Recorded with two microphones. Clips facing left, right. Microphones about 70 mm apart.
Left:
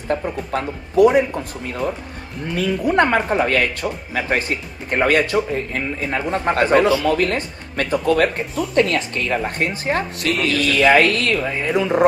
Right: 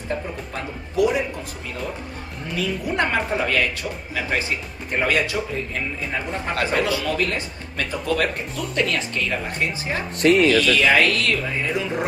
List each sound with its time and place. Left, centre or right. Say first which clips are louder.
0.1 s speech: left 7 dB; left
6.5 s speech: left 7 dB; left